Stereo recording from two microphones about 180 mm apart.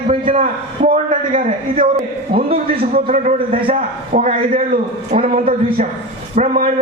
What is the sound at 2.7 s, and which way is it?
Speech, 50° right (ahead or behind).